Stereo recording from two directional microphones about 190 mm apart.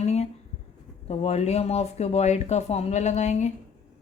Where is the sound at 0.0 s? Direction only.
35° left (ahead or behind).